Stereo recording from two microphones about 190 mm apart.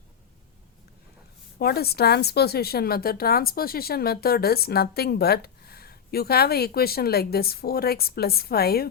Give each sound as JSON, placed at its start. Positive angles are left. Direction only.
{"t": 1.5, "sound": "speech", "side_deg": 55}